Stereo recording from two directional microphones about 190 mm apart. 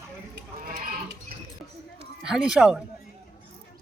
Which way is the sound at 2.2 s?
5° right (ahead or behind).